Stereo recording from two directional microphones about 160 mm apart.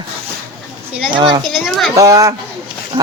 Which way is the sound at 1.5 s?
Centre (ahead or behind).